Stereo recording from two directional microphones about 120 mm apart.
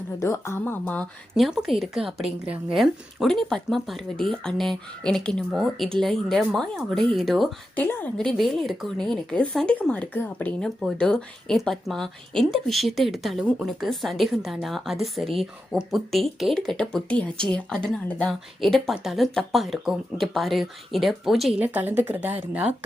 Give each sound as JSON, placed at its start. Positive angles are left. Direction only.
{"t": 0.2, "sound": "a woman's voice", "side_deg": 25}
{"t": 1.4, "sound": "a woman's voice", "side_deg": 0}
{"t": 7.8, "sound": "speech", "side_deg": 15}
{"t": 8.2, "sound": "a woman's voice", "side_deg": 5}
{"t": 21.6, "sound": "a woman's voice", "side_deg": -15}